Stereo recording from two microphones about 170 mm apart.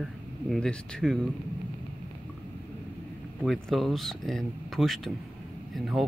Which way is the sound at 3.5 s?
Centre (ahead or behind).